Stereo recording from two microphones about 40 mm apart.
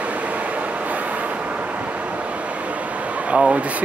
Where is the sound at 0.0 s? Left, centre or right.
Right.